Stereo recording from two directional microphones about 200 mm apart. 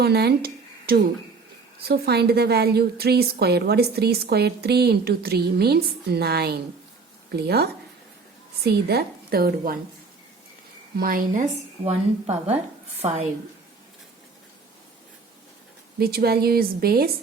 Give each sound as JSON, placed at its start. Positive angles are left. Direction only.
{"t": 0.0, "sound": "a woman's voice", "side_deg": -55}
{"t": 10.9, "sound": "a woman's voice", "side_deg": -45}
{"t": 11.9, "sound": "speech", "side_deg": -30}
{"t": 16.0, "sound": "a woman's voice", "side_deg": -50}